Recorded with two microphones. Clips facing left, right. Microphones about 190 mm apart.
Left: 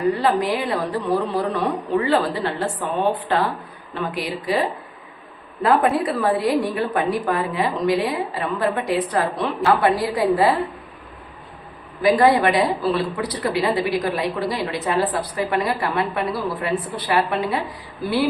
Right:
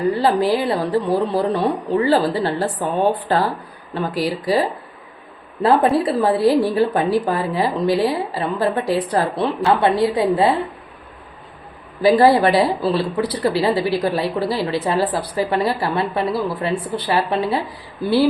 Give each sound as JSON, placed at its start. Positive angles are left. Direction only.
{"t": 0.2, "sound": "speech", "side_deg": -30}
{"t": 5.6, "sound": "a woman's voice", "side_deg": -30}
{"t": 12.0, "sound": "speech", "side_deg": -30}